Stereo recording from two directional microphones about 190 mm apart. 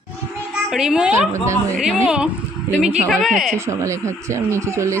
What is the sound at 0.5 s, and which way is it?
A child's voice, 5° right (ahead or behind).